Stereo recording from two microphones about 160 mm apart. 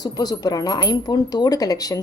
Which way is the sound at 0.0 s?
25° left (ahead or behind).